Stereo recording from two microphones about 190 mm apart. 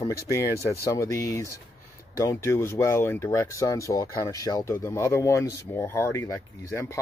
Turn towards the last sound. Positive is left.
turn(degrees=15)  # may be behind; listen again after turning